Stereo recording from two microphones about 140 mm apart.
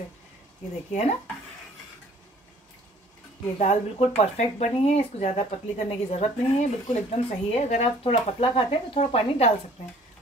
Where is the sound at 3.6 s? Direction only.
55° left (ahead or behind).